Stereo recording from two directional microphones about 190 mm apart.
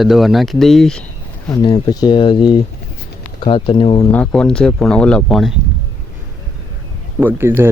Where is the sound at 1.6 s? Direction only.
20° left (ahead or behind).